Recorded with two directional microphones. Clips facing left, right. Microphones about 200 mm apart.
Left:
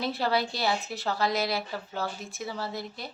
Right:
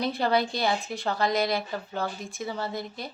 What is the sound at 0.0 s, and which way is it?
A woman's voice, centre (ahead or behind).